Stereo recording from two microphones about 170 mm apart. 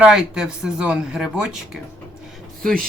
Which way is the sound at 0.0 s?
5° right (ahead or behind).